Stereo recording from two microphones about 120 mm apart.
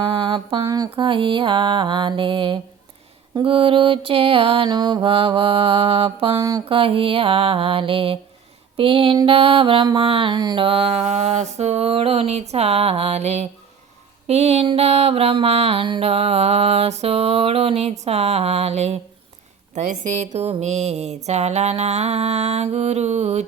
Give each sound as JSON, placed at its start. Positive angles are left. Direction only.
{"t": 0.1, "sound": "mantra", "side_deg": -45}
{"t": 0.6, "sound": "mantra", "side_deg": -30}
{"t": 0.9, "sound": "mantra", "side_deg": -45}
{"t": 4.7, "sound": "mantra", "side_deg": -35}
{"t": 5.0, "sound": "mantra", "side_deg": -50}
{"t": 8.7, "sound": "a sound", "side_deg": -50}
{"t": 9.2, "sound": "mantra", "side_deg": -50}
{"t": 19.7, "sound": "mantra", "side_deg": -80}